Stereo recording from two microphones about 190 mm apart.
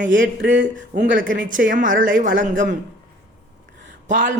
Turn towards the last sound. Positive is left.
turn(degrees=-40)  # may be behind; listen again after turning